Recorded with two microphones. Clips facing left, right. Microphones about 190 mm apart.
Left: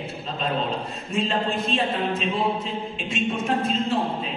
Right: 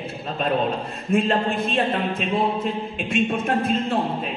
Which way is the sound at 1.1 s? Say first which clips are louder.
Right 4 dB; 55° right (ahead or behind).